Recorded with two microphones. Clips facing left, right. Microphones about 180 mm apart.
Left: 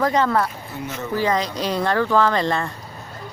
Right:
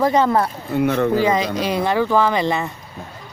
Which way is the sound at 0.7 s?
60° right (ahead or behind).